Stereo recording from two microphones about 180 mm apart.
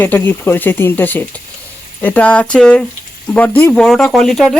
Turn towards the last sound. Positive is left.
turn(degrees=0)  # may be behind; listen again after turning